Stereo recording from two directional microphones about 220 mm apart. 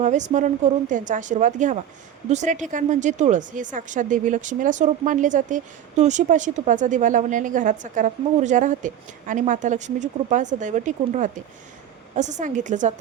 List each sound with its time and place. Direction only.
0.0 s speech: 35° right (ahead or behind)